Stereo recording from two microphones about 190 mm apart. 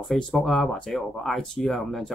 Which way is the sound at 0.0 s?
Centre (ahead or behind).